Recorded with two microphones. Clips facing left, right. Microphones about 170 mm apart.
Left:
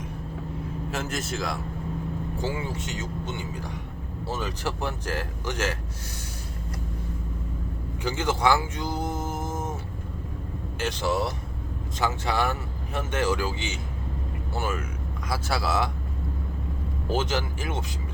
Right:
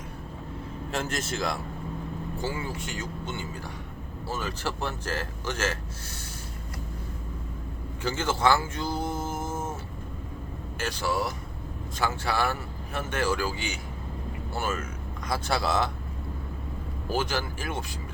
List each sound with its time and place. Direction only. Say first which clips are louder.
0.9 s a man's voice: right 1 dB; centre (ahead or behind)
2.4 s a man's voice: left 2 dB; 20° left (ahead or behind)
8.0 s speech: left 1 dB; 15° left (ahead or behind)
10.8 s a man's voice: left 3 dB; 20° left (ahead or behind)
15.3 s a man's voice: right 1 dB; 5° left (ahead or behind)
17.1 s a man's voice: left 2 dB; 20° left (ahead or behind)